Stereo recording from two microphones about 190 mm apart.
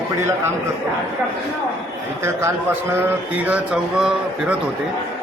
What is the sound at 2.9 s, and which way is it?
Speech, 10° right (ahead or behind).